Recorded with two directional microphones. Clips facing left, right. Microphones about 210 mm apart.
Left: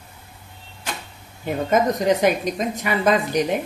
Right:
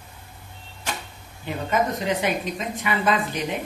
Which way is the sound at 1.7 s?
40° left (ahead or behind).